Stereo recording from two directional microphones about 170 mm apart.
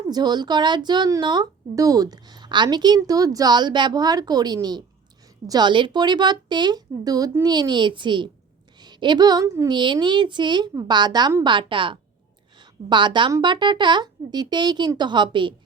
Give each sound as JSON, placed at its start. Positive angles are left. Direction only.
{"t": 0.1, "sound": "speech", "side_deg": -25}